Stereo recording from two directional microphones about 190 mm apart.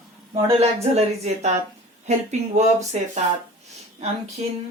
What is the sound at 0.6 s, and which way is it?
Speech, 35° right (ahead or behind).